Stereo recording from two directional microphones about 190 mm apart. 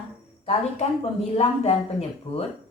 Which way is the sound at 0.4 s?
35° left (ahead or behind).